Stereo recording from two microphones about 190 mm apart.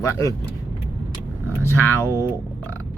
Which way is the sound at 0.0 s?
15° left (ahead or behind).